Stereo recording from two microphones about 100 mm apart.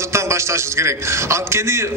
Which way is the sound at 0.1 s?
30° right (ahead or behind).